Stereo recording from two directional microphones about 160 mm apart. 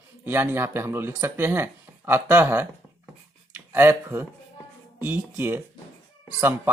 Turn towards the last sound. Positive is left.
turn(degrees=-15)  # may be behind; listen again after turning